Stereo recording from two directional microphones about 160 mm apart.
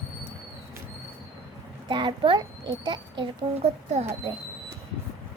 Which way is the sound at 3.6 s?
45° right (ahead or behind).